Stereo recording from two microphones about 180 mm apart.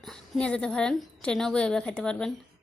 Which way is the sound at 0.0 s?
5° left (ahead or behind).